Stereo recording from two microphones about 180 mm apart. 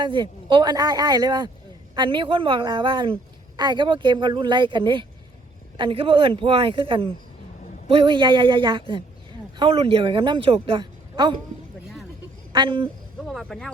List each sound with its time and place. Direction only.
0.0 s speech: 25° right (ahead or behind)
12.5 s speech: 30° right (ahead or behind)
13.2 s speech: centre (ahead or behind)